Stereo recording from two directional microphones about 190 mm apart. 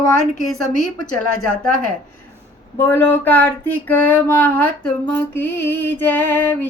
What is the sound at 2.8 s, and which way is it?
Female singing, 10° left (ahead or behind).